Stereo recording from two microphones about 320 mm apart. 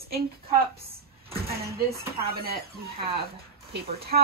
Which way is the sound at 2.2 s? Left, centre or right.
Right.